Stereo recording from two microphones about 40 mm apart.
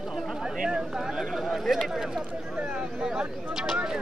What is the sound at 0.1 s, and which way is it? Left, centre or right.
Speech, centre.